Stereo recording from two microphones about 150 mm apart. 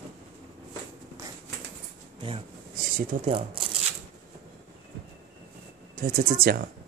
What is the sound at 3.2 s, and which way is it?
Speech, 35° right (ahead or behind).